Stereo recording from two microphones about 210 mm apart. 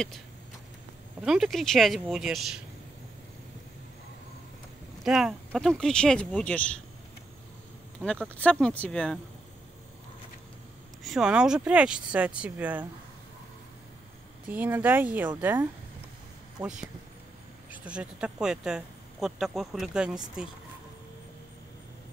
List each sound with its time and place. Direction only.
1.2 s speech: centre (ahead or behind)
5.0 s speech: centre (ahead or behind)
8.0 s speech: 5° left (ahead or behind)
11.1 s speech: 5° right (ahead or behind)
14.5 s speech: 10° right (ahead or behind)
16.6 s speech: 20° right (ahead or behind)
17.6 s speech: 5° right (ahead or behind)